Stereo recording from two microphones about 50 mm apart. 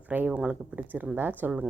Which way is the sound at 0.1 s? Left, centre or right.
Right.